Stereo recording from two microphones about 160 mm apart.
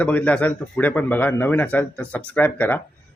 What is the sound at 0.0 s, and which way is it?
A man's voice, 10° left (ahead or behind).